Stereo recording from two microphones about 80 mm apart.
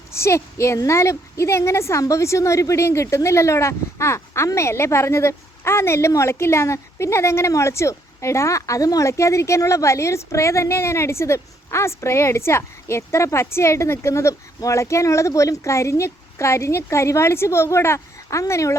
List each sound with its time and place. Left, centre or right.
0.1 s a woman's voice: left